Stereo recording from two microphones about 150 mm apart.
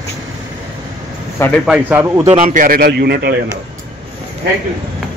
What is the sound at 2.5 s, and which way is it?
Speech, 70° right (ahead or behind).